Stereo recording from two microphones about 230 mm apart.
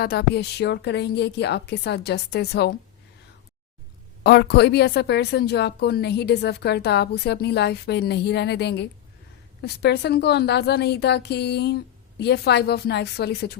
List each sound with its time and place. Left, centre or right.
0.0 s a woman's voice: left
4.2 s a woman's voice: left